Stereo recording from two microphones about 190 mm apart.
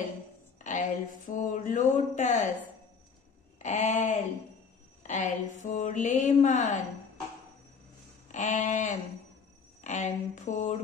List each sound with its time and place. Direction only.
0.7 s speech: 40° left (ahead or behind)
3.5 s speech: 40° left (ahead or behind)
8.3 s speech: 40° left (ahead or behind)